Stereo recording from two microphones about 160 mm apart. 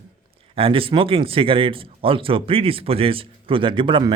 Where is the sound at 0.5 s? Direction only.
35° right (ahead or behind).